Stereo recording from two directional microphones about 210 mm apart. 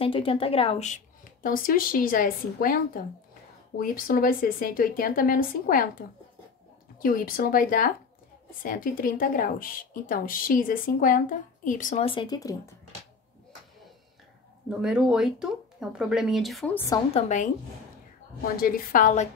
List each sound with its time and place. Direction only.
0.0 s a woman's voice: 25° left (ahead or behind)
14.7 s speech: 5° right (ahead or behind)
17.1 s a woman's voice: 35° left (ahead or behind)